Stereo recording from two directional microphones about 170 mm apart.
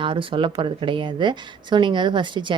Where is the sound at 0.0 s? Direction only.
30° right (ahead or behind).